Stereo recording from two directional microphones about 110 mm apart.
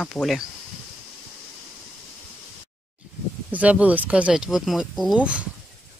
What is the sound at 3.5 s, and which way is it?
Speech, 10° right (ahead or behind).